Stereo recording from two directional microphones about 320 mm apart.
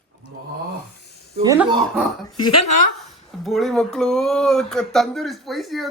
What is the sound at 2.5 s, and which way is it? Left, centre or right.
Speech, left.